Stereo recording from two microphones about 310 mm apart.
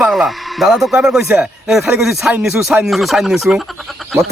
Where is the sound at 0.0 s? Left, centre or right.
Centre.